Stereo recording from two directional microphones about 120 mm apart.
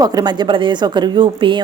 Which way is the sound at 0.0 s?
35° right (ahead or behind).